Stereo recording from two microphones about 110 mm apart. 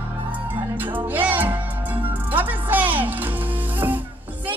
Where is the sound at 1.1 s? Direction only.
15° right (ahead or behind).